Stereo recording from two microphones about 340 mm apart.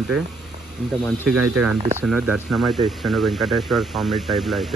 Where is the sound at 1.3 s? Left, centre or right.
Right.